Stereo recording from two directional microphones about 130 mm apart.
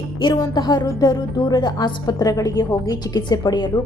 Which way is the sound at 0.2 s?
35° left (ahead or behind).